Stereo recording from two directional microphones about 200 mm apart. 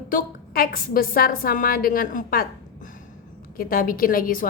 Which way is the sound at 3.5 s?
45° left (ahead or behind).